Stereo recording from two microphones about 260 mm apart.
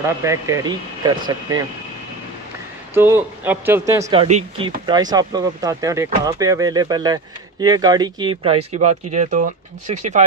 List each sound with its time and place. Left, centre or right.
0.0 s speech: centre
2.9 s speech: centre; by 10.2 s right